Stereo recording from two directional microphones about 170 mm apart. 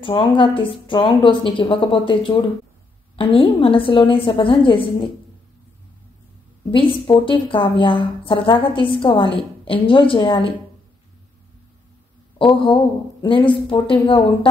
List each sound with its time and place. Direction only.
0.0 s a woman's voice: 30° left (ahead or behind)
6.7 s a woman's voice: 30° left (ahead or behind)
12.4 s a woman's voice: 30° left (ahead or behind)